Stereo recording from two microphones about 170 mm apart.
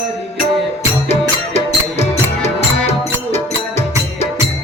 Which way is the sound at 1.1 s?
40° left (ahead or behind).